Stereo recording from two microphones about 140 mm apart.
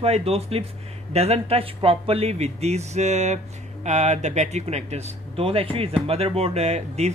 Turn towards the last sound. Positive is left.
turn(degrees=-50)  # may be behind; listen again after turning